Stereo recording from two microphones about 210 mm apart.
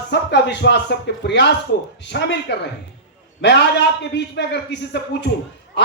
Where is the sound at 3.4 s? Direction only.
55° left (ahead or behind).